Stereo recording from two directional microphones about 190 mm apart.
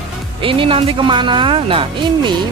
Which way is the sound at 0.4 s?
25° right (ahead or behind).